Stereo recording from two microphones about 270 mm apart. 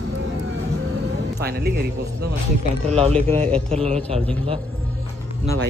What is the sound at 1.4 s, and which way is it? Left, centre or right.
Speech, right.